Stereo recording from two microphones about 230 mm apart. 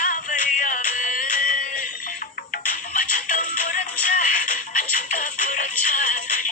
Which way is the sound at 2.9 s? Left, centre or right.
Left.